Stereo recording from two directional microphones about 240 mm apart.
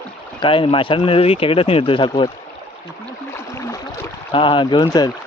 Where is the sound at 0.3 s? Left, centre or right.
Left.